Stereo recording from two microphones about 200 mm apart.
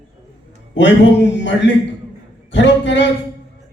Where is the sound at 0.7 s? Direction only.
60° left (ahead or behind).